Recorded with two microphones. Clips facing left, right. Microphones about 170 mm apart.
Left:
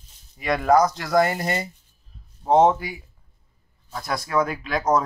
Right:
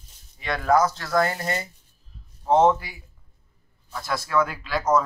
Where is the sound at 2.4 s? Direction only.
35° left (ahead or behind).